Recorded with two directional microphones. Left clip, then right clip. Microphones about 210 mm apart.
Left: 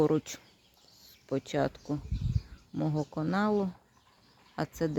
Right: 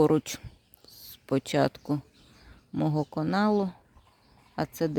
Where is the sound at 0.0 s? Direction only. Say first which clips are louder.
Right 4 dB; 25° right (ahead or behind).